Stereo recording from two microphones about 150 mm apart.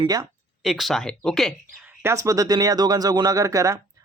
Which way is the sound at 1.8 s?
15° right (ahead or behind).